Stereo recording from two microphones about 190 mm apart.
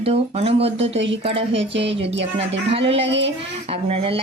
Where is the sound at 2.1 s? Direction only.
30° right (ahead or behind).